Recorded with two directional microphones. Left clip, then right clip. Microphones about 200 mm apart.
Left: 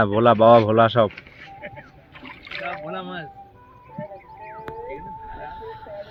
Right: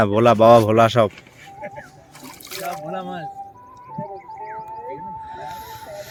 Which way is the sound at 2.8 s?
35° right (ahead or behind).